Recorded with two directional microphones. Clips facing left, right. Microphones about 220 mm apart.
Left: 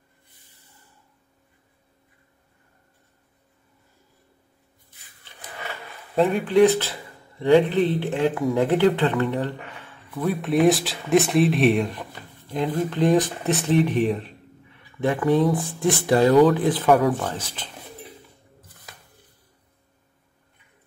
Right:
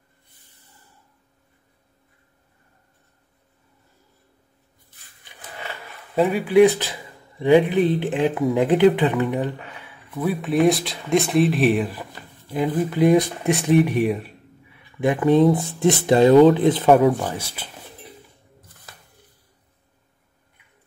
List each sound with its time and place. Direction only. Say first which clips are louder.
5.3 s a sound: right 1 dB; 15° right (ahead or behind)
6.1 s a man's voice: right 2 dB; 5° right (ahead or behind); by 17.1 s 25° right (ahead or behind)
17.3 s a man's voice: right 2 dB; 10° right (ahead or behind)